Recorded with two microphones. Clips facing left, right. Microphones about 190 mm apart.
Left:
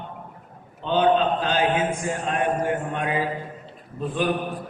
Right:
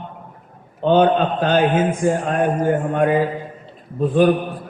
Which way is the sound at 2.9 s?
50° right (ahead or behind).